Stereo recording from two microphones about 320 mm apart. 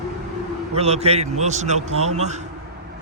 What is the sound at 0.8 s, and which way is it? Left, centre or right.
Speech, centre.